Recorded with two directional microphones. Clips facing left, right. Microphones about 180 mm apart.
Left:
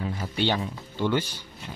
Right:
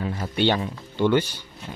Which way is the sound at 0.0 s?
65° right (ahead or behind).